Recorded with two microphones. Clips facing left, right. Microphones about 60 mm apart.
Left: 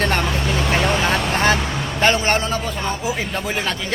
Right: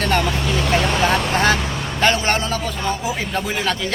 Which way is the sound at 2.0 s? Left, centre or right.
Left.